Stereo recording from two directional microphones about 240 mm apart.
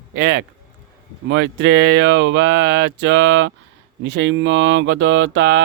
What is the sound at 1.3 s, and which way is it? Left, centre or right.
A man's voice, right.